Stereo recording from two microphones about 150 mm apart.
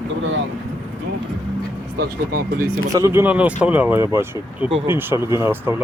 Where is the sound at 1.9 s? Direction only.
85° right.